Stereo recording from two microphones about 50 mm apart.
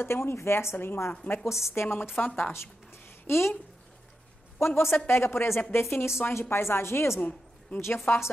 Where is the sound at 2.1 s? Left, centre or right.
Left.